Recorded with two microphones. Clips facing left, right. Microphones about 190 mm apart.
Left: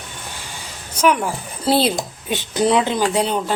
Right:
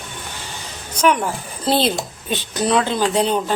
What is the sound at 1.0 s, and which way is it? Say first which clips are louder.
Speech: even; 5° left (ahead or behind).